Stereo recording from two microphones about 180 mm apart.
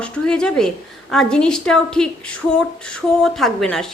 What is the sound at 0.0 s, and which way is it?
A woman's voice, 5° left (ahead or behind).